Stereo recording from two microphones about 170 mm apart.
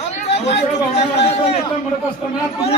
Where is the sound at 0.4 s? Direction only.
35° left (ahead or behind).